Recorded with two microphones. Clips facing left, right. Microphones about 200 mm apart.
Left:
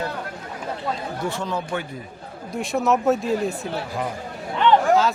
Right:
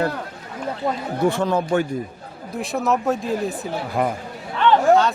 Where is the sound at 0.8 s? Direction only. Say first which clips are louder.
Right 8 dB; 50° right (ahead or behind).